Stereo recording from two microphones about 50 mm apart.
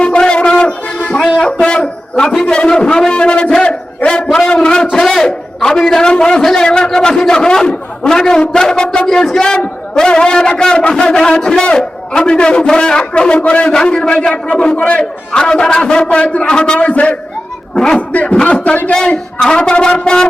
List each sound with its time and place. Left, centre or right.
0.0 s a sound: left
0.9 s music: left
1.4 s a man's voice: left
4.3 s a sound: centre
4.9 s a man's voice: centre; by 18.9 s left
18.9 s a man's voice: centre